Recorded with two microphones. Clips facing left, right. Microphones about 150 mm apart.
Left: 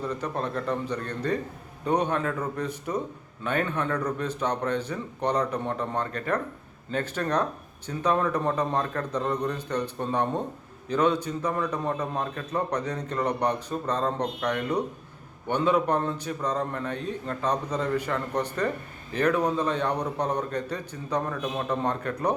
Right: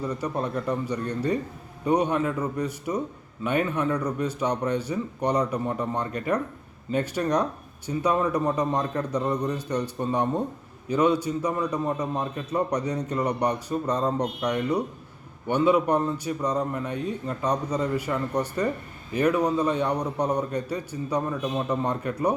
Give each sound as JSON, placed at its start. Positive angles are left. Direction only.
{"t": 0.0, "sound": "a man's voice", "side_deg": -10}